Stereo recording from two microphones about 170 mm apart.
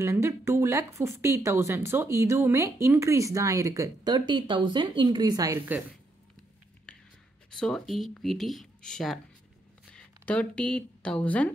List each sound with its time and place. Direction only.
0.0 s a woman's voice: 15° right (ahead or behind)
6.9 s whispering: 5° left (ahead or behind)
7.5 s speech: centre (ahead or behind)